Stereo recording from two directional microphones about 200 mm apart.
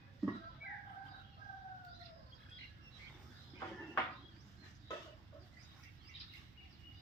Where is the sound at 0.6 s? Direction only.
45° left (ahead or behind).